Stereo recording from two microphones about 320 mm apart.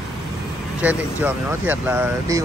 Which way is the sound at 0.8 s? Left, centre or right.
Centre.